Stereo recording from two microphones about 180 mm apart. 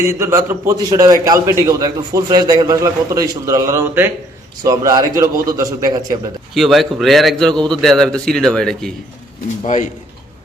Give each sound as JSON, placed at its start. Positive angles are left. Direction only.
{"t": 0.0, "sound": "a man's voice", "side_deg": -15}
{"t": 6.5, "sound": "speech", "side_deg": 0}